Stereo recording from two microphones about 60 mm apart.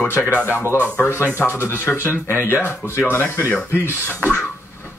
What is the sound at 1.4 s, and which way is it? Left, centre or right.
Speech, left.